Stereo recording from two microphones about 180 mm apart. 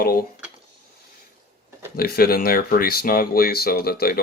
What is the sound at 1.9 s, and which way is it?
Speech, 60° left (ahead or behind).